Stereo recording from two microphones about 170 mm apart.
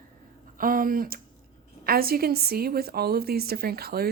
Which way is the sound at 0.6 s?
55° right (ahead or behind).